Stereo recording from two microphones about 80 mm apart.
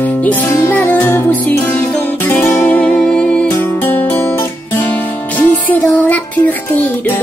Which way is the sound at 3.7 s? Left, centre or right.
Left.